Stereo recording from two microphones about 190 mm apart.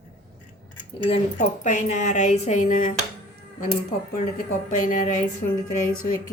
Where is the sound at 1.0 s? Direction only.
35° left (ahead or behind).